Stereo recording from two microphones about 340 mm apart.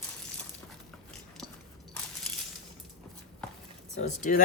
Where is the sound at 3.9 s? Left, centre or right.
Left.